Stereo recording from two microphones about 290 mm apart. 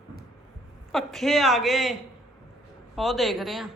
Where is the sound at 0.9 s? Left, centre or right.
Centre.